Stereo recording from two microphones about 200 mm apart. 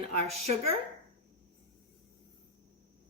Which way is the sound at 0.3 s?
30° right (ahead or behind).